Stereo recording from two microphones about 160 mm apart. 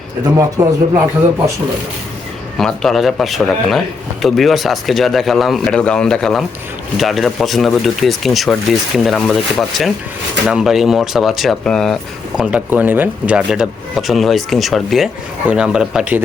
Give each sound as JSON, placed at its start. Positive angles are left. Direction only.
{"t": 0.3, "sound": "a man's voice", "side_deg": -20}
{"t": 2.6, "sound": "speech", "side_deg": 0}
{"t": 12.4, "sound": "speech", "side_deg": -10}